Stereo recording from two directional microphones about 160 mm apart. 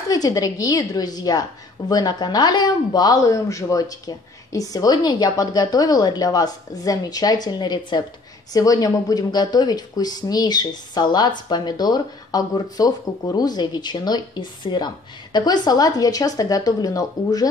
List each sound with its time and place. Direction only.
0.1 s speech: 20° left (ahead or behind)